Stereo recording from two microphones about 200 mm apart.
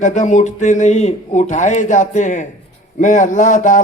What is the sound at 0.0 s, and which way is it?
A man's voice, 35° left (ahead or behind).